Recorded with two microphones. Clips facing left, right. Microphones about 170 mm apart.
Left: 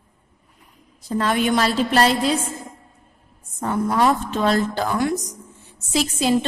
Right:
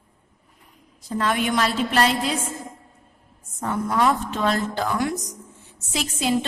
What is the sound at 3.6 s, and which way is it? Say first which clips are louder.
A woman's voice: left 3 dB; 35° left (ahead or behind).